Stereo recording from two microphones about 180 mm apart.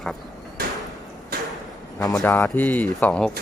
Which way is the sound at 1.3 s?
55° right (ahead or behind).